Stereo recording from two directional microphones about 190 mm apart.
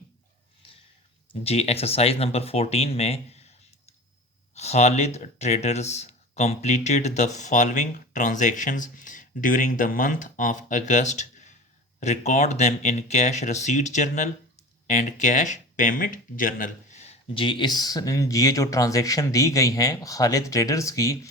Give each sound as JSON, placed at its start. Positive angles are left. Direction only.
{"t": 1.3, "sound": "speech", "side_deg": 35}
{"t": 4.5, "sound": "speech", "side_deg": 35}